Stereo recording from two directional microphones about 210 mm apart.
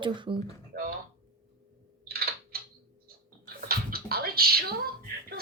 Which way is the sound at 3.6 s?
45° right (ahead or behind).